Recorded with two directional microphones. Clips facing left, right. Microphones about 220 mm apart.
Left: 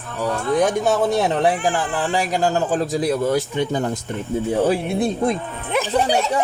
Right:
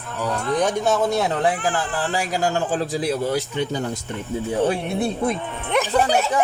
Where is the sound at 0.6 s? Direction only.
15° left (ahead or behind).